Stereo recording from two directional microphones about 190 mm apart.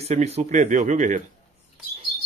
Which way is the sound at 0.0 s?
35° right (ahead or behind).